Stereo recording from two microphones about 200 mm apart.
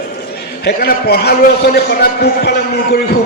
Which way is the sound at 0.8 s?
50° left (ahead or behind).